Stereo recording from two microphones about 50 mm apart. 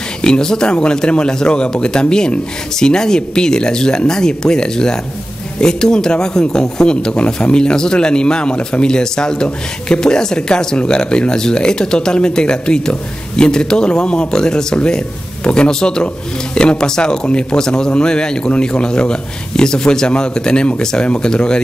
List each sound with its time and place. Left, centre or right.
0.2 s speech: centre